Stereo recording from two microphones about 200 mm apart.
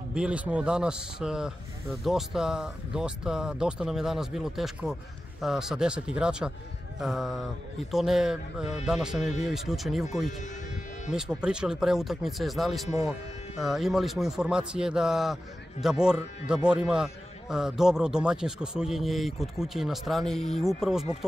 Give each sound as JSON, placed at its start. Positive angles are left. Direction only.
{"t": 0.1, "sound": "a man's voice", "side_deg": -5}
{"t": 9.2, "sound": "speech", "side_deg": 35}
{"t": 9.5, "sound": "a man's voice", "side_deg": 0}
{"t": 11.1, "sound": "a man's voice", "side_deg": -5}